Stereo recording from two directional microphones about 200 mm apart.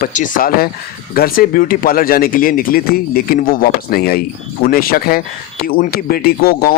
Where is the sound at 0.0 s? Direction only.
40° left (ahead or behind).